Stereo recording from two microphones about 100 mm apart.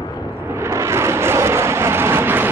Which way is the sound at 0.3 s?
25° right (ahead or behind).